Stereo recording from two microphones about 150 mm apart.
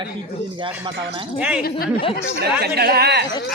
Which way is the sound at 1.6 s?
85° left.